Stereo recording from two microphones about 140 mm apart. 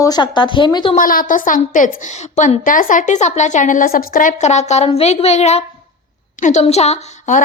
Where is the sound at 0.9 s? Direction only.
85° left; by 6.6 s 60° left (ahead or behind).